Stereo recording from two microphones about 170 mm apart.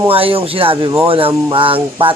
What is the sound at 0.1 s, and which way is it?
Music, 35° right (ahead or behind).